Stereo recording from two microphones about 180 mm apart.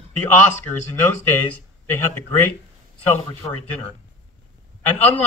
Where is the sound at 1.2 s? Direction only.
10° left (ahead or behind).